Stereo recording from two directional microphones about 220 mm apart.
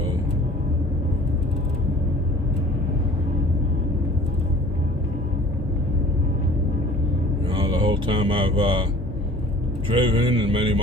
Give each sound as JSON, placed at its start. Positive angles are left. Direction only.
{"t": 7.5, "sound": "mantra", "side_deg": -25}
{"t": 10.0, "sound": "speech", "side_deg": -20}